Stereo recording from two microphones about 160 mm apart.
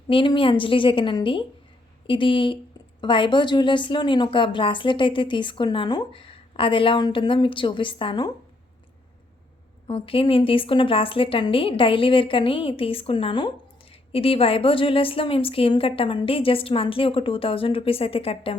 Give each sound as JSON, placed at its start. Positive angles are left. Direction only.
{"t": 0.1, "sound": "a woman's voice", "side_deg": 30}
{"t": 9.8, "sound": "a woman's voice", "side_deg": 35}